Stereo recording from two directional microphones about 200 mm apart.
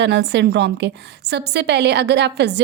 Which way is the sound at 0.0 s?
60° right (ahead or behind).